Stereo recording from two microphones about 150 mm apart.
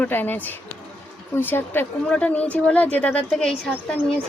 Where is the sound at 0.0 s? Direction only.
15° left (ahead or behind).